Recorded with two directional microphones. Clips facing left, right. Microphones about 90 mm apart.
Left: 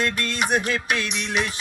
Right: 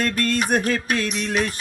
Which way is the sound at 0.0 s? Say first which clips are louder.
Right 3 dB; 45° right (ahead or behind).